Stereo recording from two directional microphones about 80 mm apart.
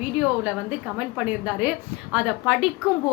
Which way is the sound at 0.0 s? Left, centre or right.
Centre.